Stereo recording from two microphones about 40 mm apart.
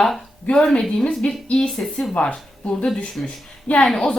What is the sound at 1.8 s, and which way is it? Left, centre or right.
Speech, centre.